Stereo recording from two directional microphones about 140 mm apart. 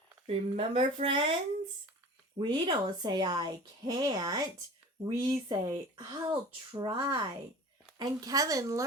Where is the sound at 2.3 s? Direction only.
35° right (ahead or behind).